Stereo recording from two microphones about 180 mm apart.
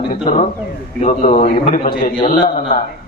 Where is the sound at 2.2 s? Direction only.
25° left (ahead or behind).